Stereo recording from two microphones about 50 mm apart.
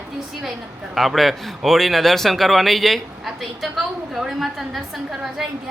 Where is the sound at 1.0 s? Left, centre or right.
Centre.